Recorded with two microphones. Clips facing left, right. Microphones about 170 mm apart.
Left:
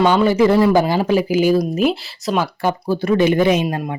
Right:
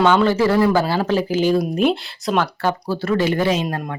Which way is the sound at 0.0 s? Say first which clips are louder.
Left 2 dB; 10° left (ahead or behind).